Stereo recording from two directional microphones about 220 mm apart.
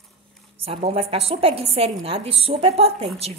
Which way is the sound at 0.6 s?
25° right (ahead or behind).